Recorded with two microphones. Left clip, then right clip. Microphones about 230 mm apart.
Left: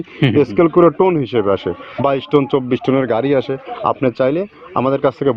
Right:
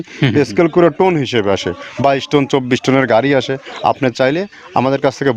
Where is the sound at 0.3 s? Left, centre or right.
Right.